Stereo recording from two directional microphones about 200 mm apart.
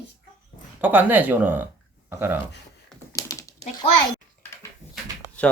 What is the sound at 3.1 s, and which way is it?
Typing, 15° left (ahead or behind).